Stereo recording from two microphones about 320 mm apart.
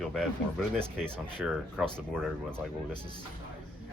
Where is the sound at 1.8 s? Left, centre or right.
Centre.